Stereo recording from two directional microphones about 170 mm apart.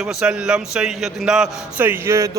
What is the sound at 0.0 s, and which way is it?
A man's voice, 5° right (ahead or behind).